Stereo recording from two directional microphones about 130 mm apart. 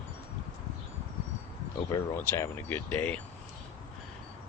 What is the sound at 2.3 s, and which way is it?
Speech, 15° left (ahead or behind).